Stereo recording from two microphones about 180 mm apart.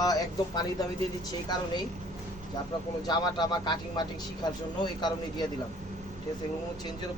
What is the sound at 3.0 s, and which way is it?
Speech, 25° left (ahead or behind).